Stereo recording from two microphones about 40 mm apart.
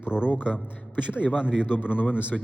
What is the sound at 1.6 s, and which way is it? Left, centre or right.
Speech, left.